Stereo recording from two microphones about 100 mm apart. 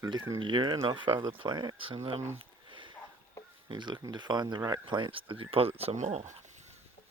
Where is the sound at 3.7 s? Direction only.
50° right (ahead or behind); by 6.7 s 90° right.